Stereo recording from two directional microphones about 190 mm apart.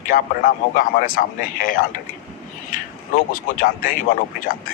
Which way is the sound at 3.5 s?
45° left (ahead or behind).